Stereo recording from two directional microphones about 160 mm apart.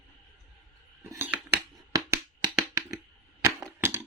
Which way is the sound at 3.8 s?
15° right (ahead or behind).